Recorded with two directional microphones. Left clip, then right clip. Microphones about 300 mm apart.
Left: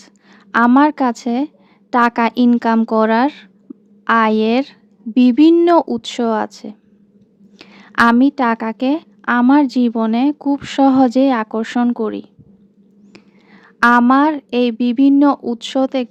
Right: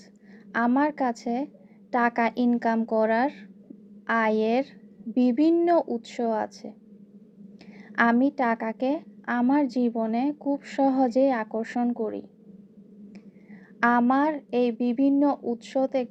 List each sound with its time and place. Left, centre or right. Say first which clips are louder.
0.5 s a woman's voice: left 12 dB; left
7.6 s a sound: left 9 dB; left
8.2 s a woman's voice: left 9 dB; left
13.1 s whispering: left 5 dB; left
14.0 s a woman's voice: left 10 dB; left